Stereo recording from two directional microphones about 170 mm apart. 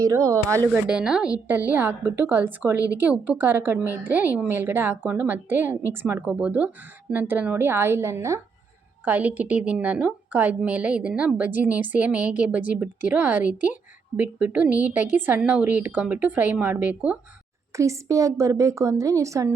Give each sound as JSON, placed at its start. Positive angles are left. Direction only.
{"t": 0.0, "sound": "a woman's voice", "side_deg": -20}
{"t": 0.7, "sound": "a woman's voice", "side_deg": -5}